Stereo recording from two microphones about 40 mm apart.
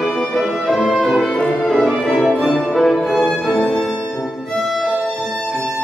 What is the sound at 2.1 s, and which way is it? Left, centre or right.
Music, centre.